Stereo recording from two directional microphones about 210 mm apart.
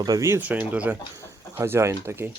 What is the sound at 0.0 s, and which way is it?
Speech, 15° right (ahead or behind).